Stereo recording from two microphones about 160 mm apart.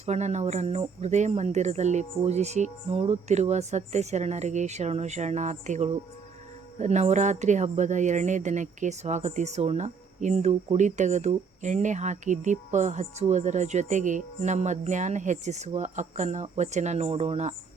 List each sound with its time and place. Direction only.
0.0 s speech: 45° right (ahead or behind)